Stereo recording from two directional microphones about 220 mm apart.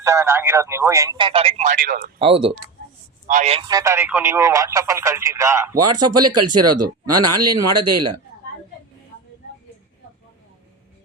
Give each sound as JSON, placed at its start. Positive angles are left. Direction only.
{"t": 0.0, "sound": "speech", "side_deg": -15}
{"t": 2.1, "sound": "speech", "side_deg": -25}
{"t": 5.8, "sound": "speech", "side_deg": -90}